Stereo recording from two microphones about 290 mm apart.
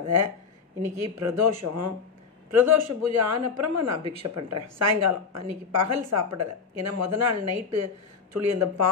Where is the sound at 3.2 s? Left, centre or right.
Right.